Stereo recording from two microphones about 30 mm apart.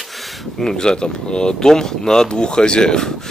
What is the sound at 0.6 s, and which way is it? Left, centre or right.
Speech, left.